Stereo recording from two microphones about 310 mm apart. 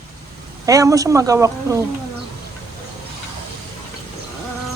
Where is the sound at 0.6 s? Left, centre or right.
Centre.